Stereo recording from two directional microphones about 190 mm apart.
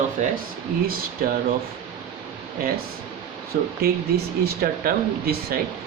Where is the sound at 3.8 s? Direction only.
55° right (ahead or behind).